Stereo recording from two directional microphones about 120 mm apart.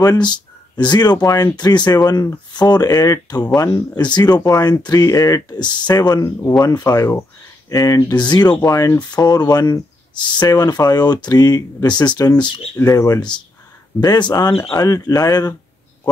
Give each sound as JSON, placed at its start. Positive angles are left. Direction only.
{"t": 0.0, "sound": "speech", "side_deg": 35}
{"t": 12.7, "sound": "speech", "side_deg": 30}